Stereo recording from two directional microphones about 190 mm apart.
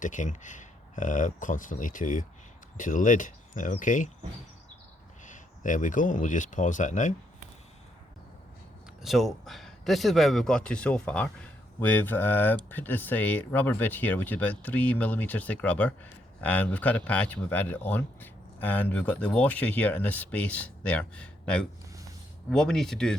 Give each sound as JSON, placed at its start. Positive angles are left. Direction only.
{"t": 0.0, "sound": "speech", "side_deg": 40}
{"t": 5.2, "sound": "speech", "side_deg": 40}
{"t": 9.0, "sound": "speech", "side_deg": 0}